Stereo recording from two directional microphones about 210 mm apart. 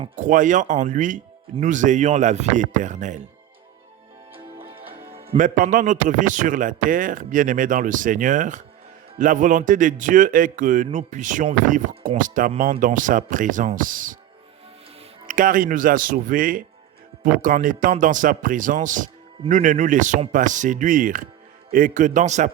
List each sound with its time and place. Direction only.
0.2 s a man's voice: 35° right (ahead or behind)
4.8 s music: 10° right (ahead or behind)
5.3 s a man's voice: 40° right (ahead or behind)
15.3 s a man's voice: 40° right (ahead or behind)